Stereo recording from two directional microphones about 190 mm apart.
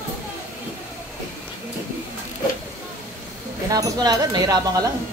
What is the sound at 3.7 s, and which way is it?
Speech, 20° right (ahead or behind).